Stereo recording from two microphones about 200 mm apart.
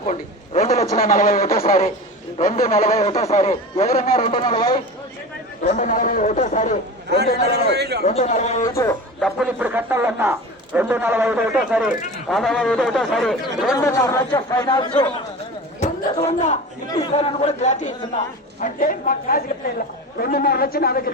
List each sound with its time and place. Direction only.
0.1 s a sound: 35° left (ahead or behind)
0.9 s a man's voice: 45° left (ahead or behind)
4.3 s speech: 20° left (ahead or behind)
5.6 s a man's voice: 40° left (ahead or behind)
7.5 s a man's voice: 55° right (ahead or behind)
8.0 s a man's voice: 35° left (ahead or behind)
8.6 s speech: 15° left (ahead or behind)
9.2 s speech: 5° right (ahead or behind)
13.7 s speech: 15° left (ahead or behind)
16.2 s a man's voice: 35° left (ahead or behind)